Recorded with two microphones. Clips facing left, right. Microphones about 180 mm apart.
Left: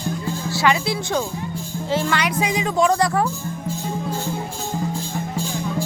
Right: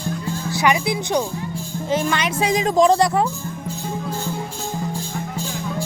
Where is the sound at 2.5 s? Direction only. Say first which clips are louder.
Right 5 dB; 40° right (ahead or behind).